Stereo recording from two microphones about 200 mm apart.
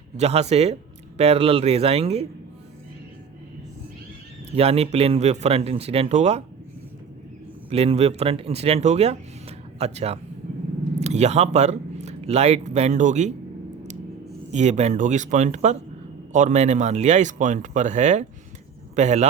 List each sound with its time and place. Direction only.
0.2 s speech: 30° right (ahead or behind)
4.5 s speech: 30° right (ahead or behind)
7.7 s speech: 30° right (ahead or behind)
14.5 s speech: 35° right (ahead or behind)